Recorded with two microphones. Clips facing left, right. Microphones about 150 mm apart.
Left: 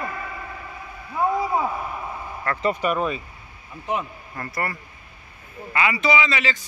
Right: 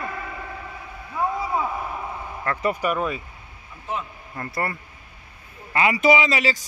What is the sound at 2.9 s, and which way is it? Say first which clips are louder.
Speech: left 1 dB; 20° left (ahead or behind).